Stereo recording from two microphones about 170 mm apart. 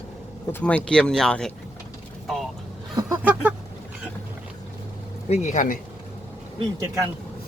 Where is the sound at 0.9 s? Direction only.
5° left (ahead or behind).